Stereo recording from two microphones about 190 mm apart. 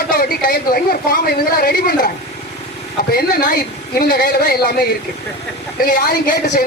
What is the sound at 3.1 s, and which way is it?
A man's voice, 50° left (ahead or behind).